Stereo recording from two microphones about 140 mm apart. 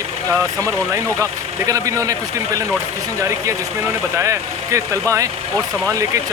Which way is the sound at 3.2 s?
20° right (ahead or behind).